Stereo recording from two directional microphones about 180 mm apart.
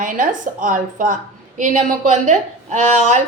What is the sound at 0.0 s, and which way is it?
A woman's voice, 45° right (ahead or behind).